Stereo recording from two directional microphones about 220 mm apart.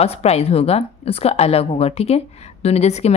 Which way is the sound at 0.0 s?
30° left (ahead or behind).